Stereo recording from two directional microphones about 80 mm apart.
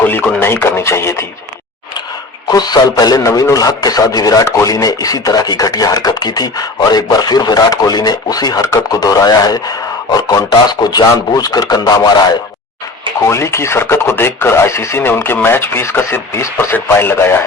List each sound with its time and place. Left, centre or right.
0.0 s speech: left
2.5 s speech: left
13.1 s speech: left